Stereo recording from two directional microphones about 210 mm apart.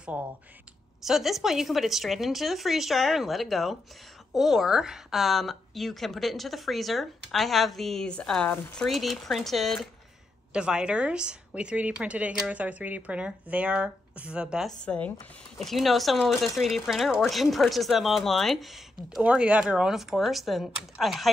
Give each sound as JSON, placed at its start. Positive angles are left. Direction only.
{"t": 1.0, "sound": "speech", "side_deg": 0}